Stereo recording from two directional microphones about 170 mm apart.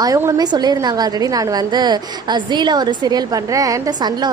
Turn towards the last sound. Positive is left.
turn(degrees=-20)  # may be behind; listen again after turning